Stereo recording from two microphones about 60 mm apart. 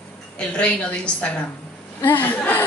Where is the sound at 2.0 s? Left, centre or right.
Left.